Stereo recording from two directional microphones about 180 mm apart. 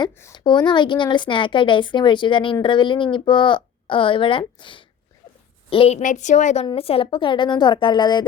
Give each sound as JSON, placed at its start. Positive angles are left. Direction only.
{"t": 0.0, "sound": "a woman's voice", "side_deg": 20}
{"t": 6.0, "sound": "a woman's voice", "side_deg": 45}